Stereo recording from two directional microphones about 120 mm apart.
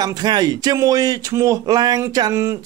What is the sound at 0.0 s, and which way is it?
Speech, 35° right (ahead or behind).